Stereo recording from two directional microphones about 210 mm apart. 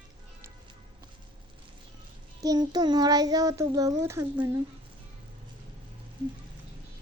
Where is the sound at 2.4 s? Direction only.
20° right (ahead or behind).